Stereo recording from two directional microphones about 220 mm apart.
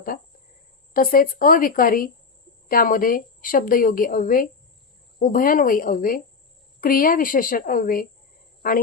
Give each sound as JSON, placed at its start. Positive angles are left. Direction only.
{"t": 0.9, "sound": "a woman's voice", "side_deg": 40}